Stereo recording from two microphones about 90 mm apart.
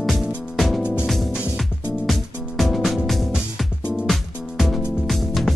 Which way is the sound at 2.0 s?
Centre (ahead or behind).